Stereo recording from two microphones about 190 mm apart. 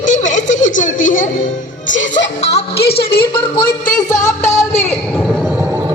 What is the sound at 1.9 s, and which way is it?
Speech, 35° left (ahead or behind).